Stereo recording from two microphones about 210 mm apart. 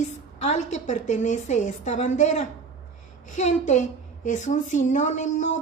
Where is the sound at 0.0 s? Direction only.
35° left (ahead or behind).